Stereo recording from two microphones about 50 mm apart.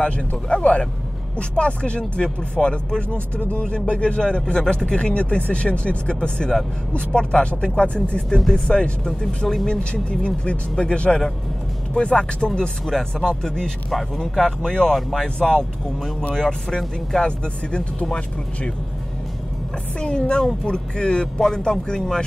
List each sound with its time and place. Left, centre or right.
0.0 s speech: left; by 15.2 s centre
15.2 s speech: centre
20.0 s speech: centre